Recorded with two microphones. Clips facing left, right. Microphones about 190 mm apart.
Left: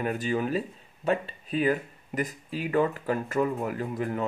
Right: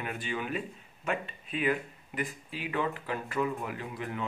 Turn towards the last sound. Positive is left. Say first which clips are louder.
# left 7 dB
turn(degrees=40)  # may be behind; listen again after turning